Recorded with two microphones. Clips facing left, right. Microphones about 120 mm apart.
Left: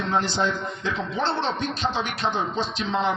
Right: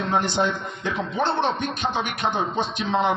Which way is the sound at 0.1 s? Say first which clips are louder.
Right 1 dB; 15° right (ahead or behind).